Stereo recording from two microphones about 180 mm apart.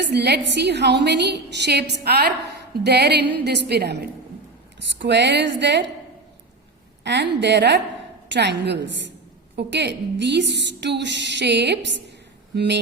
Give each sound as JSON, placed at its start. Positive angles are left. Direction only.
{"t": 0.0, "sound": "a woman's voice", "side_deg": -65}
{"t": 4.8, "sound": "a woman's voice", "side_deg": -75}
{"t": 7.0, "sound": "a woman's voice", "side_deg": -70}